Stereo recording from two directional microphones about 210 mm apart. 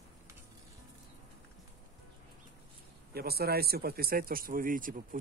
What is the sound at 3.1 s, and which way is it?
Speech, 50° right (ahead or behind).